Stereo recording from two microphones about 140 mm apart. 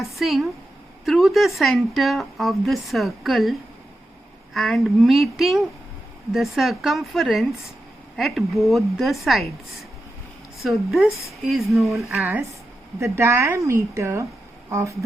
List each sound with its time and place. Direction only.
0.0 s a woman's voice: centre (ahead or behind)
4.5 s a woman's voice: centre (ahead or behind)
10.6 s a woman's voice: centre (ahead or behind)
12.2 s a woman's voice: 10° right (ahead or behind)